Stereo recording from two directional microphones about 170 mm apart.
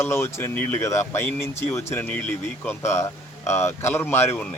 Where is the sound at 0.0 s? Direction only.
15° left (ahead or behind).